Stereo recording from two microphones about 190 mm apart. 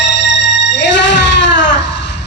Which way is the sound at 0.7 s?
70° left (ahead or behind).